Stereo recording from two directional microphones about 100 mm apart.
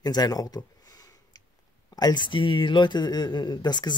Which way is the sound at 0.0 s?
40° left (ahead or behind).